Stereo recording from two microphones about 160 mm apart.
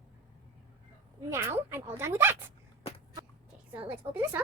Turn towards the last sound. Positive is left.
turn(degrees=-15)  # may be behind; listen again after turning